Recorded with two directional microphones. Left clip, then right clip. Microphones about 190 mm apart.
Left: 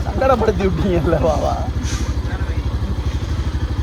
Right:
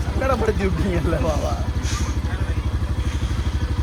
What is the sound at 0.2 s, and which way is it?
Speech, 55° left (ahead or behind).